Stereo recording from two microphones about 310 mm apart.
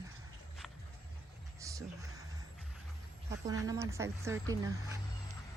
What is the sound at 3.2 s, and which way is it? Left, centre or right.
Speech, centre.